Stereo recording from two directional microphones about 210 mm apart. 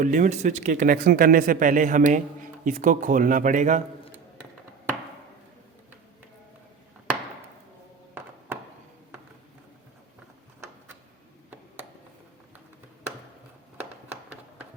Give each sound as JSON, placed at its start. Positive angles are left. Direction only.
{"t": 0.0, "sound": "speech", "side_deg": -40}